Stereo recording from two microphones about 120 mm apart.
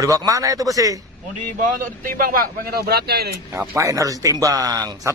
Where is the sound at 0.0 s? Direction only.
30° right (ahead or behind).